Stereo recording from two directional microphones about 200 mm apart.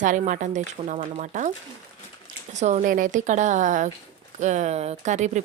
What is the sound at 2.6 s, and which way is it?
A woman's voice, 35° right (ahead or behind).